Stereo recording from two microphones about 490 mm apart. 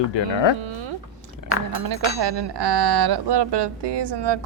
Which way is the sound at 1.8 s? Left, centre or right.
Right.